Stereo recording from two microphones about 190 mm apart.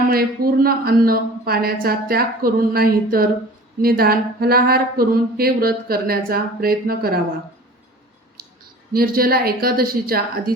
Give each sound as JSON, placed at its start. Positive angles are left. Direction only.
{"t": 0.1, "sound": "speech", "side_deg": -50}
{"t": 8.9, "sound": "speech", "side_deg": -50}